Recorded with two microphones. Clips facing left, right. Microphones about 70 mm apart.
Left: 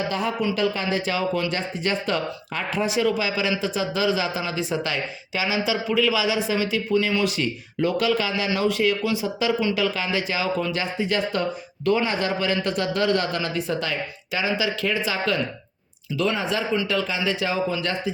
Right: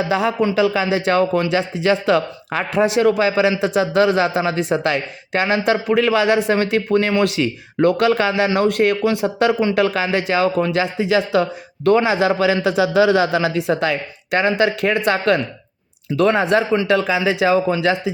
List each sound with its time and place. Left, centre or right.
0.1 s speech: right
7.2 s a man's voice: right
11.9 s a man's voice: right